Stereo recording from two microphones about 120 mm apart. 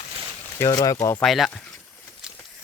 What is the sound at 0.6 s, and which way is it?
Speech, 30° left (ahead or behind).